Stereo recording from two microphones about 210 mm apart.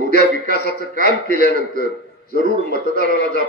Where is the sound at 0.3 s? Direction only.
40° right (ahead or behind).